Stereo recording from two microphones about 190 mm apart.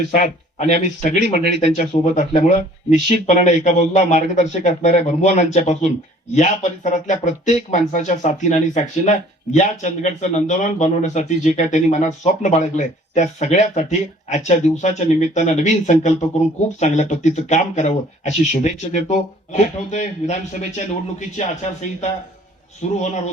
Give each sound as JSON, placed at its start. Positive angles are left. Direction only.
{"t": 0.1, "sound": "speech", "side_deg": 40}
{"t": 22.8, "sound": "speech", "side_deg": 40}